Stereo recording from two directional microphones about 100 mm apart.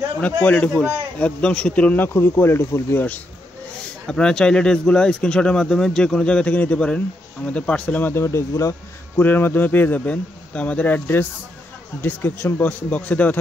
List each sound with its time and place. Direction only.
0.2 s speech: 15° left (ahead or behind)
4.1 s speech: 5° left (ahead or behind)
8.1 s a man's voice: 25° left (ahead or behind)
9.1 s a man's voice: 20° left (ahead or behind)